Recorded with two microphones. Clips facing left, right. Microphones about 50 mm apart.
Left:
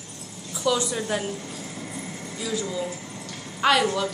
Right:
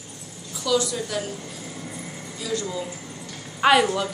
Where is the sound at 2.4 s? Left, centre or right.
Centre.